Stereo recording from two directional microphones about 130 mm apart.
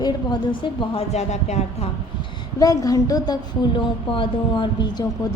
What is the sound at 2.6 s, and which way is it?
Speech, 25° left (ahead or behind).